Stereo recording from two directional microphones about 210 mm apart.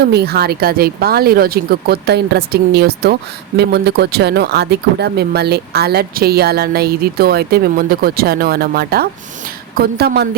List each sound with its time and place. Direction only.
0.0 s speech: 50° right (ahead or behind)